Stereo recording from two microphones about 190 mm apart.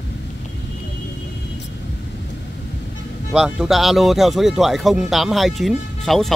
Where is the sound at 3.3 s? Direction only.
Centre (ahead or behind).